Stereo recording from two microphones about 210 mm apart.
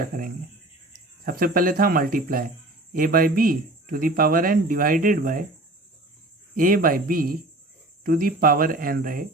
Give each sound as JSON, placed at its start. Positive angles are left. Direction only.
{"t": 0.0, "sound": "speech", "side_deg": -40}
{"t": 6.6, "sound": "speech", "side_deg": -40}